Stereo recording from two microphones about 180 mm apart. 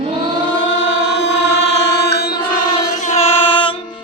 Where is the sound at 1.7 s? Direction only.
70° left (ahead or behind).